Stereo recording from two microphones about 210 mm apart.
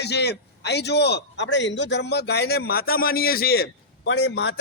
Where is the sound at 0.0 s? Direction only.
50° left (ahead or behind).